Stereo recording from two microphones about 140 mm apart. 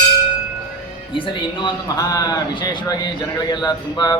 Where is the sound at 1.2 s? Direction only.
30° left (ahead or behind).